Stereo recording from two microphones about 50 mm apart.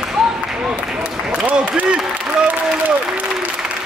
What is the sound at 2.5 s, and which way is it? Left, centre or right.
Applause, right.